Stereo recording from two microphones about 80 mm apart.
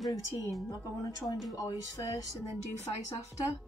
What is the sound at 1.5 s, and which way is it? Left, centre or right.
Speech, left.